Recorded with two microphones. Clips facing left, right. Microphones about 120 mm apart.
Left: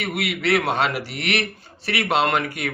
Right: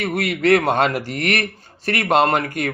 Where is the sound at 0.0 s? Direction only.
45° right (ahead or behind).